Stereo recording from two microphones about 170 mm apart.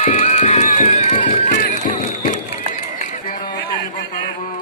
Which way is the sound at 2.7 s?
45° left (ahead or behind).